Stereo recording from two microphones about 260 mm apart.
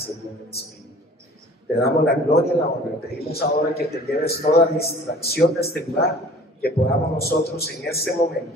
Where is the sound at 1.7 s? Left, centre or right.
Left.